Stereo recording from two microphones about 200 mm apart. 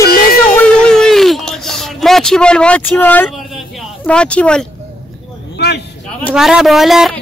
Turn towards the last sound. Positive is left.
turn(degrees=0)  # may be behind; listen again after turning